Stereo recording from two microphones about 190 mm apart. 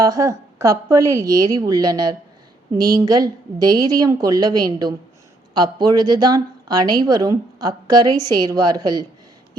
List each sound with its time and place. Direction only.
0.0 s a woman's voice: 15° right (ahead or behind)